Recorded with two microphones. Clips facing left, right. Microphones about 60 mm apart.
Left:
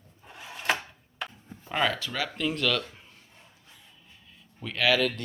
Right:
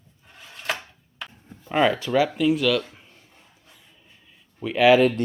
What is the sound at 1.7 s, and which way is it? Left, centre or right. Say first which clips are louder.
Speech: right 8 dB; centre.